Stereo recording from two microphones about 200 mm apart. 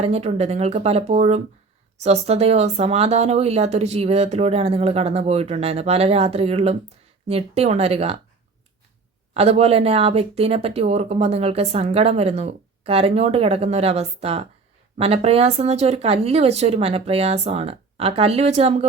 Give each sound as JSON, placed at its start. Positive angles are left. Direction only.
{"t": 0.0, "sound": "speech", "side_deg": -30}
{"t": 9.3, "sound": "speech", "side_deg": -30}